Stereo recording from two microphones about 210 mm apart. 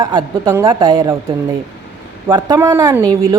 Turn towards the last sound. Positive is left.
turn(degrees=-15)  # may be behind; listen again after turning